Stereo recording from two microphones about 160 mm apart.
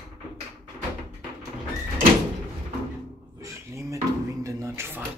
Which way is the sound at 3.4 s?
20° right (ahead or behind).